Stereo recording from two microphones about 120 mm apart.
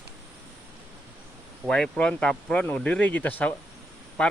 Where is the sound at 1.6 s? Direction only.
5° left (ahead or behind).